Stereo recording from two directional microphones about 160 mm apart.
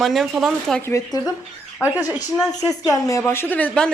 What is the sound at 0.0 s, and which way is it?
Speech, centre (ahead or behind).